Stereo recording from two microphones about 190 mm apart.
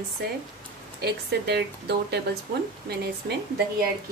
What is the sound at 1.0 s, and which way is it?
A woman's voice, 60° right (ahead or behind).